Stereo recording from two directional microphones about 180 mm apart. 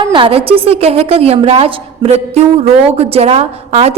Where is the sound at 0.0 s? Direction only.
25° right (ahead or behind).